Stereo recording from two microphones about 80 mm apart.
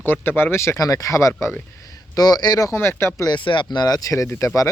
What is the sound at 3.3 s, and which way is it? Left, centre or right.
Speech, left.